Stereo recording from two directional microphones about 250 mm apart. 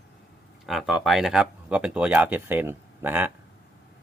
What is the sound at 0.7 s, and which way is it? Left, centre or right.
Speech, centre.